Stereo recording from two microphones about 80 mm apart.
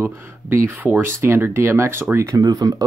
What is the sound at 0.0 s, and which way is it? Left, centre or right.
Speech, right.